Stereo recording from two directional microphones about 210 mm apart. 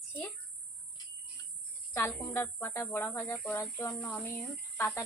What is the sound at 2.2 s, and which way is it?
Speech, 10° left (ahead or behind).